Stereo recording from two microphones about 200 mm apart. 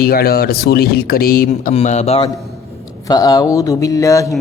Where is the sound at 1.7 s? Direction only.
35° left (ahead or behind).